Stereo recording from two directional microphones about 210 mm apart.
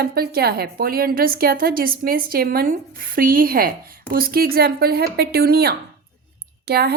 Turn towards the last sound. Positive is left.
turn(degrees=-50)  # may be behind; listen again after turning